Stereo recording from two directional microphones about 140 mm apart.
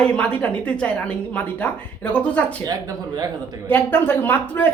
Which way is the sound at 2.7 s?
25° right (ahead or behind).